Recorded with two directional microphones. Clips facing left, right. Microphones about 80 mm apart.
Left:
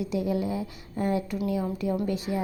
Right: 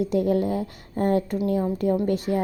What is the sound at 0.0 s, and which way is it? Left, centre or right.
A woman's voice, right.